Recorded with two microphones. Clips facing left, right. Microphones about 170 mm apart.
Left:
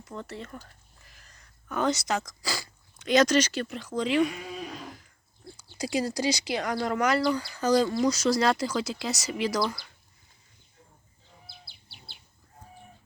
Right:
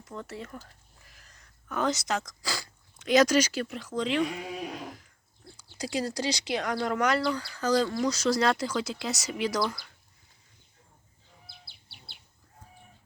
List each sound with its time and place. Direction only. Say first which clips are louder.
0.0 s speech: left 1 dB; centre (ahead or behind)
4.5 s a sound: right 2 dB; 10° right (ahead or behind)
5.5 s speech: left 3 dB; 10° left (ahead or behind)
7.3 s speech: left 2 dB; 15° left (ahead or behind)